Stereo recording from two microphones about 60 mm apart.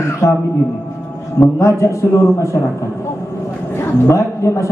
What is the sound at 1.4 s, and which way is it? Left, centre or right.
A man's voice, left.